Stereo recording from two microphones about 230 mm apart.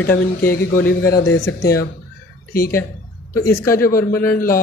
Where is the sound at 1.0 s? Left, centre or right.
Left.